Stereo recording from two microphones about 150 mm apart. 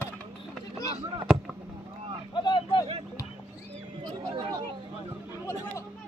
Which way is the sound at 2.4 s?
30° left (ahead or behind).